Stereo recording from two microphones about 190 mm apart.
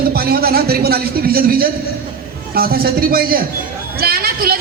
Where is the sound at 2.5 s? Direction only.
50° right (ahead or behind).